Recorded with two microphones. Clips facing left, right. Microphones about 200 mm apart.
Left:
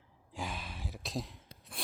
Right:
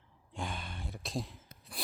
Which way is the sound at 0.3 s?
5° left (ahead or behind).